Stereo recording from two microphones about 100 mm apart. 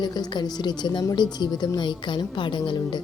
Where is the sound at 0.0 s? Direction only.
45° left (ahead or behind).